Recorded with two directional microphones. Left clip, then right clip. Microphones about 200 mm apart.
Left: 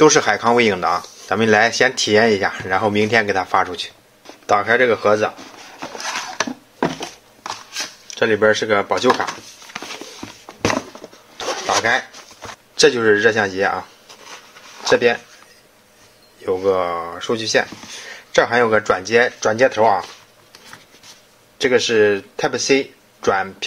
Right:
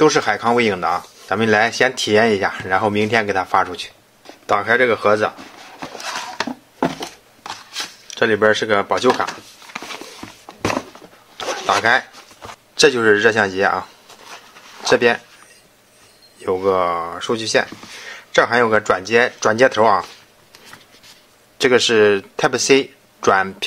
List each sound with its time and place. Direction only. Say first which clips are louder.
0.0 s speech: left 2 dB; centre (ahead or behind)
7.4 s a sound: left 1 dB; 15° right (ahead or behind)
9.7 s a sound: right 1 dB; centre (ahead or behind)
11.3 s zipper: even; 5° right (ahead or behind)
11.6 s zipper: right 2 dB; 20° right (ahead or behind)
12.4 s speech: even; 10° right (ahead or behind)
14.3 s a sound: right 1 dB; 20° right (ahead or behind)
16.3 s speech: right 1 dB; 20° right (ahead or behind)
19.4 s speech: right 1 dB; 25° right (ahead or behind)
21.5 s speech: right 2 dB; 25° right (ahead or behind)